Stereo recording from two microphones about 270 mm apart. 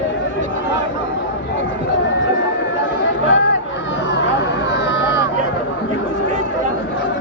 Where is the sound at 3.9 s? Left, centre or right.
Left.